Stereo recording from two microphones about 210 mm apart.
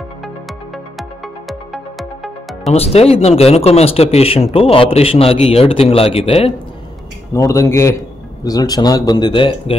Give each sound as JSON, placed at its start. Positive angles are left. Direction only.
{"t": 1.5, "sound": "music", "side_deg": 0}
{"t": 2.7, "sound": "speech", "side_deg": 30}
{"t": 7.3, "sound": "speech", "side_deg": 15}